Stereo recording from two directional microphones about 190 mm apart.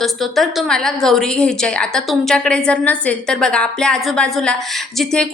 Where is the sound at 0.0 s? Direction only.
Centre (ahead or behind).